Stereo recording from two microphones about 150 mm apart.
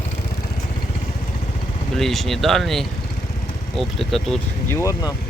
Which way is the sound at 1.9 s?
Centre (ahead or behind).